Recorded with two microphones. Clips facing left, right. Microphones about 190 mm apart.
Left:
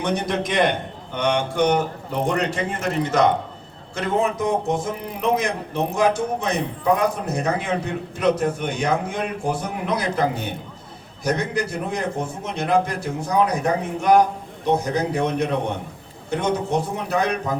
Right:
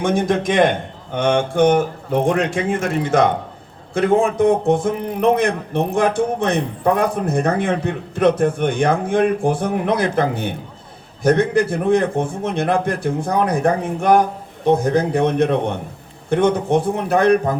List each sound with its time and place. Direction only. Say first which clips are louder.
0.0 s a man's voice: right 5 dB; 50° right (ahead or behind)